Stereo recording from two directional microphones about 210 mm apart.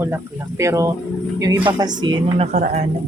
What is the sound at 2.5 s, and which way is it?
Speech, 35° right (ahead or behind).